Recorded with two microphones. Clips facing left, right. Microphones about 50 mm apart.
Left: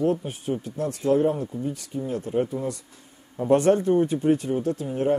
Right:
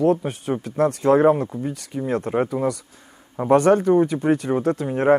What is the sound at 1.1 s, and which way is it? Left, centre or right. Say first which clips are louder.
Speech: right 4 dB; right.